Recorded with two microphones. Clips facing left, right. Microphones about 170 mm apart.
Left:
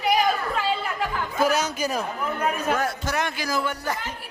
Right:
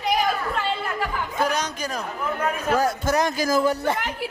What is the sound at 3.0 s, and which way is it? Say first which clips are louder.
Speech: right 5 dB; 40° right (ahead or behind).